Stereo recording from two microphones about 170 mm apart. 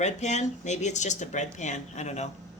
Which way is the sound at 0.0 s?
40° left (ahead or behind).